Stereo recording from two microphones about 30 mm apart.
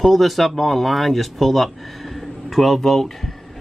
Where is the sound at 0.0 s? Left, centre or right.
Centre.